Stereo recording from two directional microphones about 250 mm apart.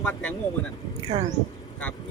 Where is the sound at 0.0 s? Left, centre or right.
Centre.